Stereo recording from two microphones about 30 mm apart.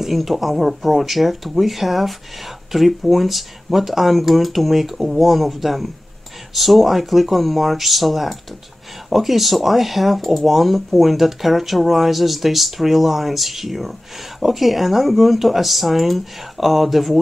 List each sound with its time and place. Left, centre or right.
0.1 s speech: centre